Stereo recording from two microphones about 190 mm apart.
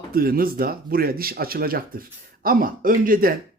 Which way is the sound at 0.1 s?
50° right (ahead or behind).